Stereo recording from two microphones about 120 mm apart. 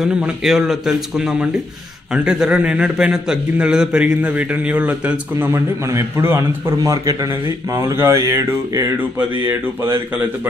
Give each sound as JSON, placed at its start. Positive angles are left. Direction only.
{"t": 0.0, "sound": "a man's voice", "side_deg": -5}
{"t": 5.5, "sound": "a man's voice", "side_deg": -25}